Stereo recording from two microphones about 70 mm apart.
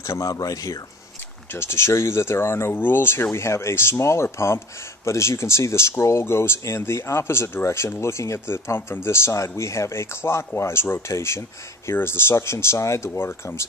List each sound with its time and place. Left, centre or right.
0.0 s speech: left
1.5 s speech: left